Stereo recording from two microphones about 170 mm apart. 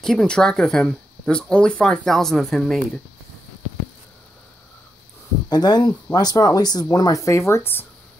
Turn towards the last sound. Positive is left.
turn(degrees=10)  # may be behind; listen again after turning